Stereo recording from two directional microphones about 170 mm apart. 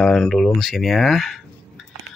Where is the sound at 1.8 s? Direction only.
Centre (ahead or behind).